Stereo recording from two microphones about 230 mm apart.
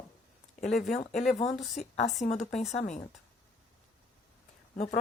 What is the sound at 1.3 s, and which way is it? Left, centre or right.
Speech, left.